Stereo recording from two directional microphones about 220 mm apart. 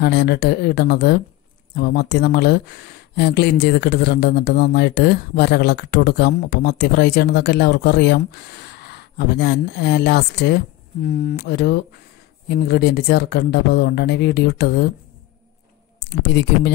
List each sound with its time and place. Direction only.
0.0 s speech: 45° left (ahead or behind)
16.1 s speech: 50° left (ahead or behind)